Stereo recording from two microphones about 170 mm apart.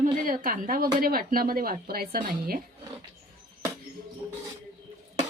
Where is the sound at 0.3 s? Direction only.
55° right (ahead or behind).